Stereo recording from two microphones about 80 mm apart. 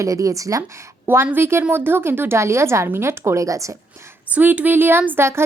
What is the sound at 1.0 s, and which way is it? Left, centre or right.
A woman's voice, right.